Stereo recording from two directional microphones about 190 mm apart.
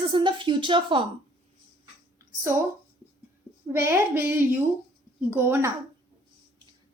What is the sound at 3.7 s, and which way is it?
A woman's voice, 15° right (ahead or behind).